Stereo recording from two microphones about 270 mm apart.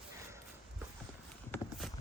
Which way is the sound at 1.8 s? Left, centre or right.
Centre.